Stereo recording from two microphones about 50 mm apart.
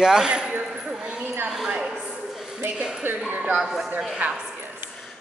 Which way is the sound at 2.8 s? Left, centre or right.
Centre.